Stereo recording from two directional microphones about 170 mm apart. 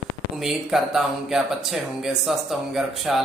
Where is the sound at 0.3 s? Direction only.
Centre (ahead or behind).